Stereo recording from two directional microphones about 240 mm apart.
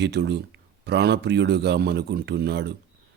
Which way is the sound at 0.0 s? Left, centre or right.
Right.